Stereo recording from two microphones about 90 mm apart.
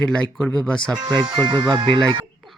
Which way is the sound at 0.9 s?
55° right (ahead or behind).